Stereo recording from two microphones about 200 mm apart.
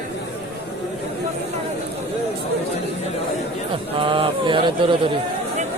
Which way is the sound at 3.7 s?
25° right (ahead or behind).